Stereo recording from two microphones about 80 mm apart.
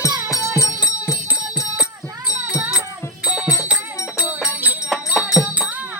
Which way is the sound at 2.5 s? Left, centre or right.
Centre.